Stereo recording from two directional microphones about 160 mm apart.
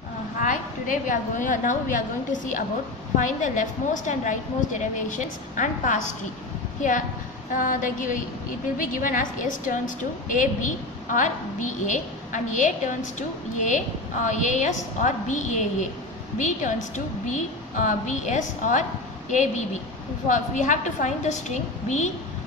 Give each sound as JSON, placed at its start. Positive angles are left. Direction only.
{"t": 0.4, "sound": "a woman's voice", "side_deg": 55}